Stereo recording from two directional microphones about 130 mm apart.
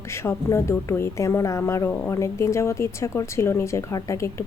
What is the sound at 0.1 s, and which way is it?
Speech, 20° left (ahead or behind).